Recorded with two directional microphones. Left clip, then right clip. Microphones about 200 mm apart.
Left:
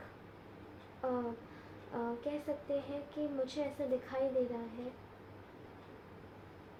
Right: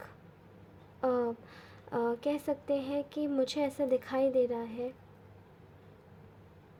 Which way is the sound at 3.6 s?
55° right (ahead or behind).